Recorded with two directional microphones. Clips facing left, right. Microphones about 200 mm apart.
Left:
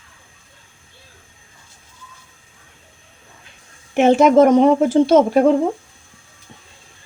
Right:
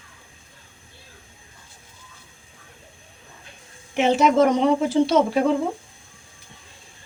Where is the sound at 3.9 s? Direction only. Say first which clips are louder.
Left 6 dB; 50° left (ahead or behind).